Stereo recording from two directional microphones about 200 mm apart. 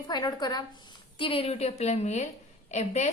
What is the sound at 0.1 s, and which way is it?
A woman's voice, 20° left (ahead or behind).